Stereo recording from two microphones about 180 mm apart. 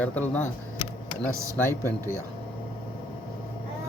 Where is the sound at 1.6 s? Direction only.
15° left (ahead or behind).